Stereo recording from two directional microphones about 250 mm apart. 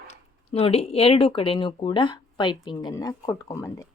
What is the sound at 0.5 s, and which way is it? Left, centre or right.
A woman's voice, left.